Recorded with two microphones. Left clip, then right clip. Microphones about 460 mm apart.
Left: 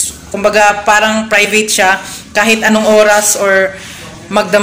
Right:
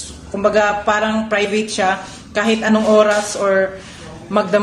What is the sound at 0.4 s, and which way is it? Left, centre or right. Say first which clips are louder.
A woman's voice: left 6 dB; right.